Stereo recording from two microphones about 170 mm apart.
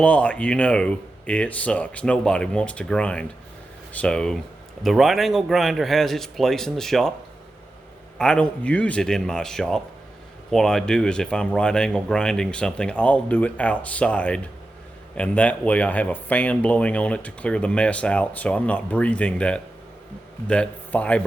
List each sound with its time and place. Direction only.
0.0 s speech: 5° left (ahead or behind)
8.2 s speech: 5° left (ahead or behind)